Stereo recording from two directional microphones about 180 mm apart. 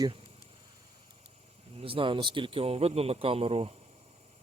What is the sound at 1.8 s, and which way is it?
Speech, 30° right (ahead or behind).